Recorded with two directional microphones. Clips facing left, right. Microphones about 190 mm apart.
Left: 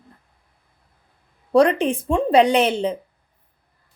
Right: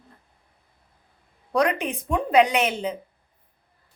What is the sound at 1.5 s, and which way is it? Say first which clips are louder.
A woman's voice: left 7 dB; 30° left (ahead or behind).